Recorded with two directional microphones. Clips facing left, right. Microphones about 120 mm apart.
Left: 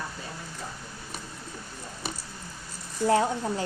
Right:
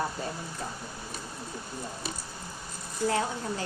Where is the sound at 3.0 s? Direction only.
30° left (ahead or behind).